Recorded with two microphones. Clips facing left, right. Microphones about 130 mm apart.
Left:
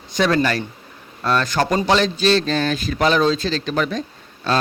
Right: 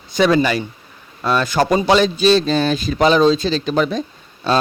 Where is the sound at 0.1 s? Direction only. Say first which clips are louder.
Right 3 dB; 5° right (ahead or behind).